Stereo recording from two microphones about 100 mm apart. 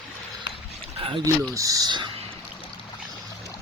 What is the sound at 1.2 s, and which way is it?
Speech, 35° right (ahead or behind).